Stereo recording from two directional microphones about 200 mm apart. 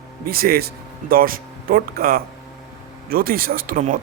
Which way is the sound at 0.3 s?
50° right (ahead or behind).